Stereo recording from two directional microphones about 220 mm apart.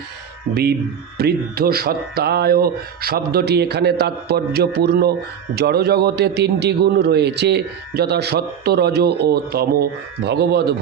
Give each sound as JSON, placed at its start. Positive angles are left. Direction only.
{"t": 0.5, "sound": "a man's voice", "side_deg": -45}